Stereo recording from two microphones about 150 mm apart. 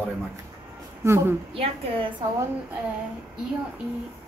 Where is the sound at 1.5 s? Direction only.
35° right (ahead or behind).